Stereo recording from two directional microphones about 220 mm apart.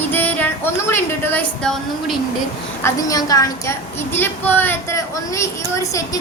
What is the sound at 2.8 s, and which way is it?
A woman's voice, 15° left (ahead or behind).